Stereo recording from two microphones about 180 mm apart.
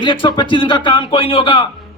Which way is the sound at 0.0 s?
25° left (ahead or behind).